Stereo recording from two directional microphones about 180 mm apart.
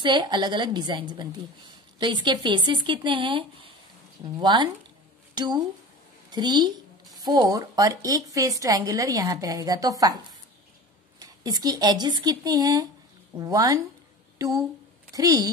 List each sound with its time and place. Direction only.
0.0 s a woman's voice: 25° right (ahead or behind)
15.1 s a woman's voice: 20° right (ahead or behind)